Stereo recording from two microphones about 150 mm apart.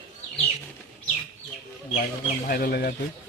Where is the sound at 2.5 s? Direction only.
90° left.